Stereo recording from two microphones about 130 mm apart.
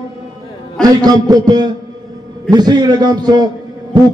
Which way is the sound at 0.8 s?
30° right (ahead or behind).